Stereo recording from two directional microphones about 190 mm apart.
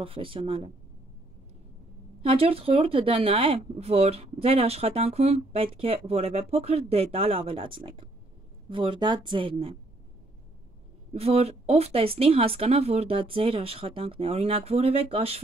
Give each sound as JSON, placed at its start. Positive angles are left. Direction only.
{"t": 0.0, "sound": "speech", "side_deg": -30}
{"t": 2.2, "sound": "speech", "side_deg": -30}
{"t": 11.1, "sound": "speech", "side_deg": -30}